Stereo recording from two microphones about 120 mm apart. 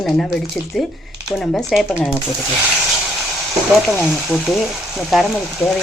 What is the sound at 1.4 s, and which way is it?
Speech, 5° left (ahead or behind).